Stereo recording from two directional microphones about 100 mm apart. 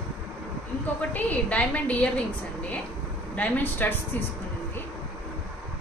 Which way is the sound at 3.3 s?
15° left (ahead or behind).